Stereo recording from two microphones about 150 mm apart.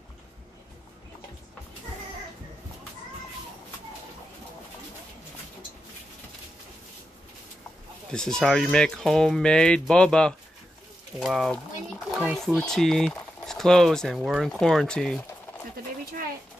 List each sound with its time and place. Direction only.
8.1 s speech: 5° left (ahead or behind)